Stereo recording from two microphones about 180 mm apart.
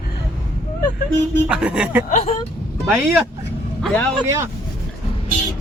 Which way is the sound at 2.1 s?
45° left (ahead or behind).